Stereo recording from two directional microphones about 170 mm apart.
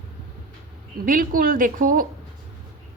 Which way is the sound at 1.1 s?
55° right (ahead or behind).